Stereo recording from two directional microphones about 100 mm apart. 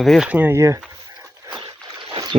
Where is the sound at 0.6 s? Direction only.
30° right (ahead or behind).